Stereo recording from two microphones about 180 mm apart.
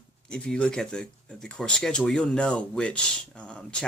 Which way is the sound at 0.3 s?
5° left (ahead or behind).